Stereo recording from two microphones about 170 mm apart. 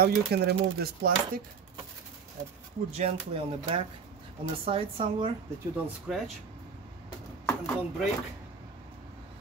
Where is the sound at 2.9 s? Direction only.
35° right (ahead or behind).